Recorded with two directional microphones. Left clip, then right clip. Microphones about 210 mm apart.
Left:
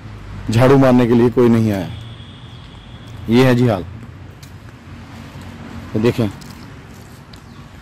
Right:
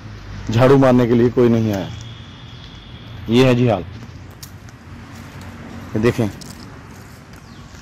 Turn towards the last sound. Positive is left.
turn(degrees=5)  # may be behind; listen again after turning